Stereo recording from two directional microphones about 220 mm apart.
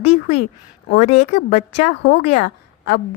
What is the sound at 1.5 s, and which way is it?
Speech, 30° left (ahead or behind).